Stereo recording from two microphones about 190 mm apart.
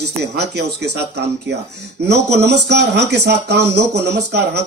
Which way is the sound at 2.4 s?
60° right (ahead or behind).